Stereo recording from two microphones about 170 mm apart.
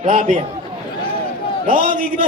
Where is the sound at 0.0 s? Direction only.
50° right (ahead or behind).